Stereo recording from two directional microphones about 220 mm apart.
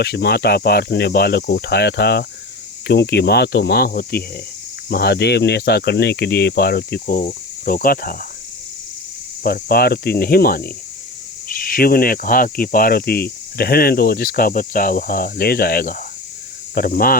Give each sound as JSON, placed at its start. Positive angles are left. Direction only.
{"t": 0.0, "sound": "speech", "side_deg": 50}
{"t": 9.4, "sound": "speech", "side_deg": 45}